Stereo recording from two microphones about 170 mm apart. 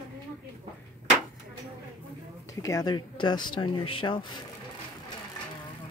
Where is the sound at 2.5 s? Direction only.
20° left (ahead or behind).